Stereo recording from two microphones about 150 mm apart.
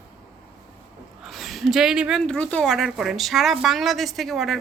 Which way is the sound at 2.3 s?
5° left (ahead or behind).